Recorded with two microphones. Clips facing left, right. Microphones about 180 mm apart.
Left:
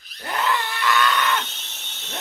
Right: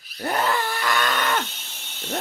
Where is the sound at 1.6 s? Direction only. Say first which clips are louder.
Even; 5° right (ahead or behind).